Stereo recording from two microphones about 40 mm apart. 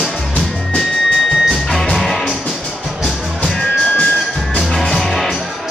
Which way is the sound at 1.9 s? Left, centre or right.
Centre.